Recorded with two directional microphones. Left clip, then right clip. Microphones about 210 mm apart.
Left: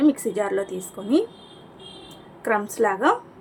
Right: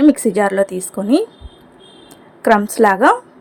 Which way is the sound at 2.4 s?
40° right (ahead or behind).